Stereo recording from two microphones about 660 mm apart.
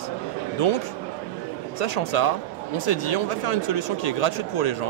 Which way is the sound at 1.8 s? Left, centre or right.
Left.